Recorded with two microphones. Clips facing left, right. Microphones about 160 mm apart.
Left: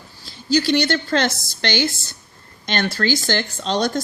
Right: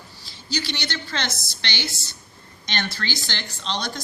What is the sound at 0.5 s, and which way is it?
Speech, 45° left (ahead or behind).